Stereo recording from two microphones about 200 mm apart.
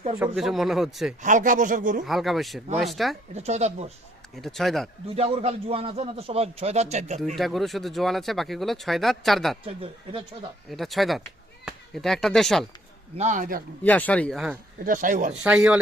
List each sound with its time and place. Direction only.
0.3 s speech: centre (ahead or behind)
1.2 s a man's voice: 40° right (ahead or behind)
2.0 s speech: centre (ahead or behind)
3.3 s a man's voice: 35° right (ahead or behind)
4.4 s speech: centre (ahead or behind)
5.0 s a man's voice: 30° right (ahead or behind)
7.3 s speech: centre (ahead or behind)
9.6 s speech: 30° right (ahead or behind)
10.7 s speech: centre (ahead or behind)
13.1 s a man's voice: 40° right (ahead or behind)
13.8 s speech: 5° left (ahead or behind)
14.8 s a man's voice: 40° right (ahead or behind)
15.4 s speech: 5° right (ahead or behind)